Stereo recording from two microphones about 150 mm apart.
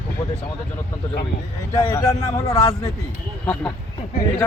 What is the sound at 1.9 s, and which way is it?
Speech, 20° left (ahead or behind).